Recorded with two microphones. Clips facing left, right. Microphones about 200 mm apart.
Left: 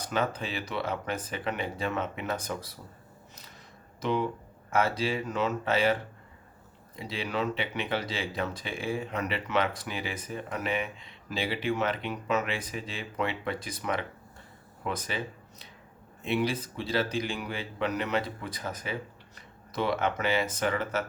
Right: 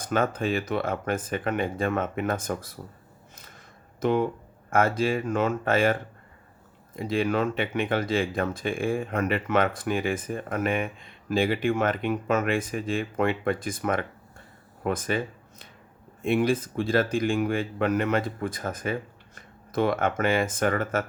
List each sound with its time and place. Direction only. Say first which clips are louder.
0.0 s speech: right 5 dB; 50° right (ahead or behind)
4.0 s speech: right 5 dB; 50° right (ahead or behind)